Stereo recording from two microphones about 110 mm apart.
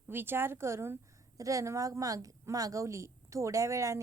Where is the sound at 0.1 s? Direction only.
20° right (ahead or behind).